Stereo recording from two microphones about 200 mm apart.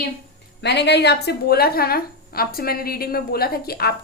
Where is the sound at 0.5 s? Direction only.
60° left (ahead or behind).